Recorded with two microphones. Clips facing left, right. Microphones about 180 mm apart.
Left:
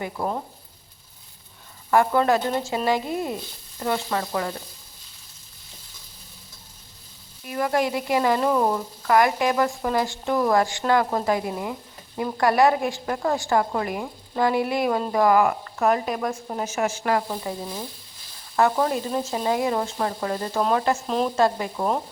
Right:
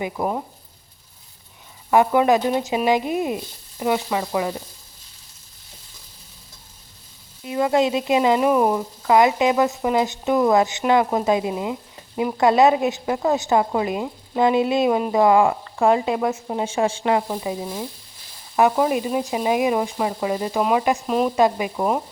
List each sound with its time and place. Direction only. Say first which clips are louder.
0.0 s speech: right 3 dB; 15° right (ahead or behind)
1.9 s speech: right 3 dB; 15° right (ahead or behind)
7.4 s speech: right 4 dB; 20° right (ahead or behind)
17.0 s speech: right 3 dB; 15° right (ahead or behind)